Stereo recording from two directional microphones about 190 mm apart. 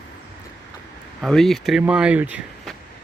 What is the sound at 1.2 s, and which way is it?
Speech, centre (ahead or behind).